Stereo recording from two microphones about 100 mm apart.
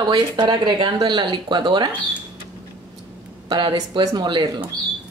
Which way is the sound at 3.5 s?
45° right (ahead or behind).